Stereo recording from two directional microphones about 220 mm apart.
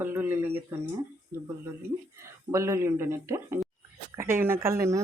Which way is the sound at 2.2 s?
15° right (ahead or behind).